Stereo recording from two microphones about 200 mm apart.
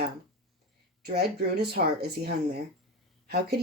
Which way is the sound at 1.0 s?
50° right (ahead or behind).